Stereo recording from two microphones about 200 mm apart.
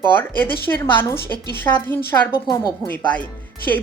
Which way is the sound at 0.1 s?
10° left (ahead or behind).